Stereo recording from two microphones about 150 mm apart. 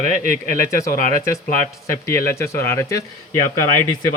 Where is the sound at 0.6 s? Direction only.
20° left (ahead or behind).